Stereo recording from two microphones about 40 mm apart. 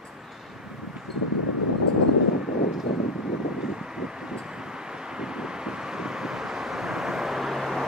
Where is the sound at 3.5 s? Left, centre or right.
Centre.